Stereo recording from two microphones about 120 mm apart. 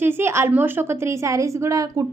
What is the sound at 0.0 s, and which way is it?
A woman's voice, 20° right (ahead or behind).